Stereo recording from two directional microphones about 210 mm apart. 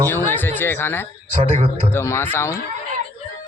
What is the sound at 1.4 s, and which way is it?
Speech, 30° right (ahead or behind).